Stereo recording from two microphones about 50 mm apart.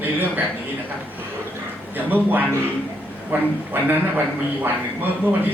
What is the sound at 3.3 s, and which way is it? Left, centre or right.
A man's voice, right.